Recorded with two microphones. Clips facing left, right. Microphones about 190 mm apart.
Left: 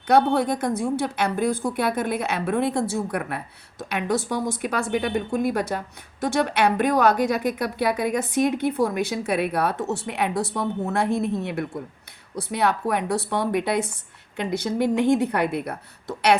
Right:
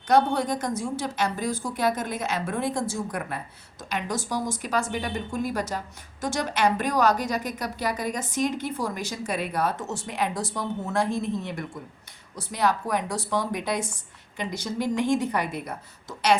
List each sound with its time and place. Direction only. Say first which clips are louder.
0.1 s a woman's voice: left 3 dB; 60° left (ahead or behind)